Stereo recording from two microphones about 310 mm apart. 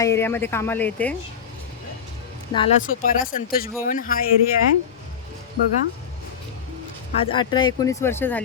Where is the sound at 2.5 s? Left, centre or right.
Left.